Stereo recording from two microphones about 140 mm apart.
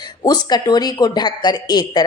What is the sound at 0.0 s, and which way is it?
A woman's voice, 30° left (ahead or behind).